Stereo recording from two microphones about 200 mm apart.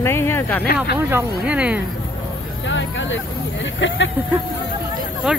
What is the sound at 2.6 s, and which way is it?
Hubbub, 65° left (ahead or behind).